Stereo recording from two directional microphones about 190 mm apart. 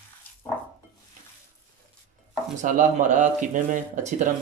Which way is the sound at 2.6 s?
40° right (ahead or behind).